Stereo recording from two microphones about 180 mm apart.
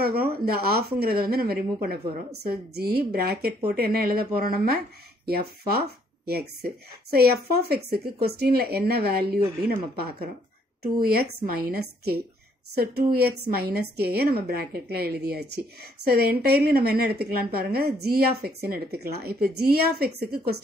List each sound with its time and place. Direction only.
0.0 s a woman's voice: 60° right (ahead or behind)
10.8 s a woman's voice: 55° right (ahead or behind)